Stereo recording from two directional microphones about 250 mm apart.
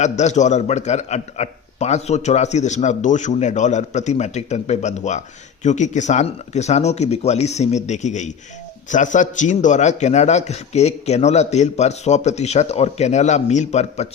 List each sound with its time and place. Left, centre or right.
0.0 s a man's voice: left